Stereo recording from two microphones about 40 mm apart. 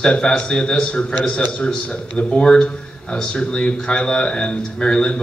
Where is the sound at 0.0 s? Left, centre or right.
Left.